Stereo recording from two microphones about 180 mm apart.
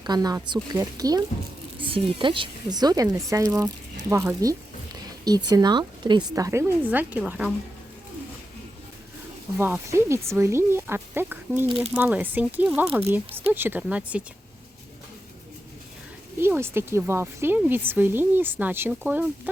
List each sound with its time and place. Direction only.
0.0 s a woman's voice: 20° right (ahead or behind); by 7.5 s 5° right (ahead or behind)
9.6 s a woman's voice: 10° right (ahead or behind)
11.6 s speech: 30° right (ahead or behind)
11.9 s a woman's voice: 10° right (ahead or behind)
16.4 s a woman's voice: 15° right (ahead or behind)